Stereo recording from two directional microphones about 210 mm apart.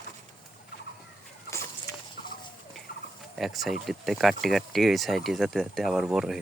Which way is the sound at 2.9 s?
45° left (ahead or behind).